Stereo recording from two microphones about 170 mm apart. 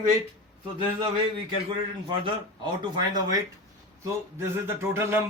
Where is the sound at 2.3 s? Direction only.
30° right (ahead or behind).